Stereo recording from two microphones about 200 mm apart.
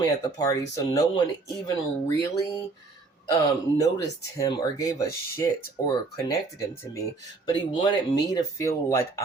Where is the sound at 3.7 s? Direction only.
15° left (ahead or behind).